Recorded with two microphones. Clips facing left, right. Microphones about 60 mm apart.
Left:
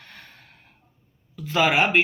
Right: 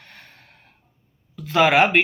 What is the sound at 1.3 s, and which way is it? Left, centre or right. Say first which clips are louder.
Speech: right 4 dB; right.